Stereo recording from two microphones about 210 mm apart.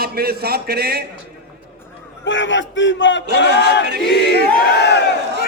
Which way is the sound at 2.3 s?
60° left (ahead or behind).